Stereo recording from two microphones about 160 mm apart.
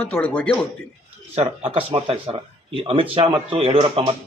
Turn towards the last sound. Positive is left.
turn(degrees=-35)  # may be behind; listen again after turning